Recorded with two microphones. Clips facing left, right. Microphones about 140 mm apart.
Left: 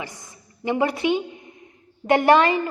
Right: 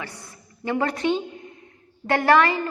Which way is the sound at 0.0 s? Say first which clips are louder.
Left 1 dB; 15° left (ahead or behind).